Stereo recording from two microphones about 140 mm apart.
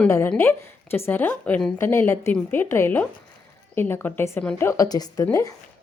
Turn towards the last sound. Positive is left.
turn(degrees=25)  # may be behind; listen again after turning